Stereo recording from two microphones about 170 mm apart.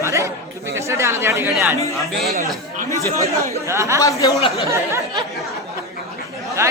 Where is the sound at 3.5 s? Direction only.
15° right (ahead or behind).